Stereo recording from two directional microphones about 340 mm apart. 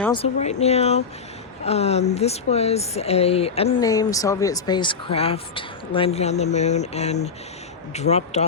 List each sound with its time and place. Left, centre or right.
0.0 s speech: centre